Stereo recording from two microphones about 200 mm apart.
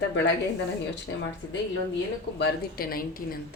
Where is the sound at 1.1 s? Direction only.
80° left.